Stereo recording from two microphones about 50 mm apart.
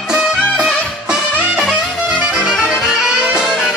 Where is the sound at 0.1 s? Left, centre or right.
Centre.